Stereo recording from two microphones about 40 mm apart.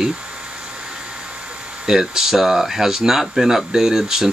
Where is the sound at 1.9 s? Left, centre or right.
Centre.